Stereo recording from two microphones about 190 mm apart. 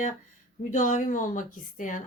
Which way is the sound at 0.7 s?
40° left (ahead or behind).